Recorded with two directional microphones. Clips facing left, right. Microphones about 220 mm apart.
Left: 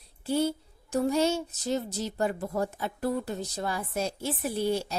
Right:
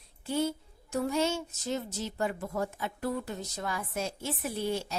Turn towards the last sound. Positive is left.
turn(degrees=35)  # may be behind; listen again after turning